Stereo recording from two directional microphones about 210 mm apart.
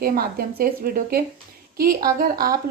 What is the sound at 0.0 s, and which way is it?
Speech, 45° right (ahead or behind).